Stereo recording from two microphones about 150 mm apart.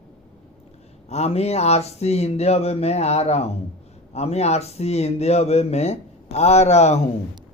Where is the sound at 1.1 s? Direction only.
45° left (ahead or behind).